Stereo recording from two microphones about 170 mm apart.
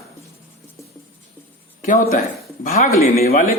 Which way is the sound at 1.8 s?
50° left (ahead or behind).